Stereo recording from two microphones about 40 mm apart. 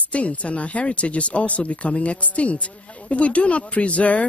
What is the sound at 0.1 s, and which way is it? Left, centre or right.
Speech, left.